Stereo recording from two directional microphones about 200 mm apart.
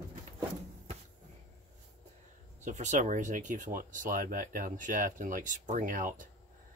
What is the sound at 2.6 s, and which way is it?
Speech, 35° right (ahead or behind).